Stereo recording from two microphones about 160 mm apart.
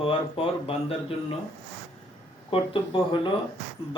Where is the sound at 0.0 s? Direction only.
35° left (ahead or behind).